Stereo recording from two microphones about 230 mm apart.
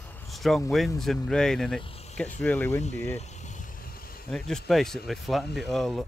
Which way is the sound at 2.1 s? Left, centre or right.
Centre.